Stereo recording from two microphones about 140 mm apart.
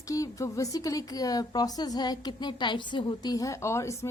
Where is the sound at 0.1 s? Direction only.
25° left (ahead or behind).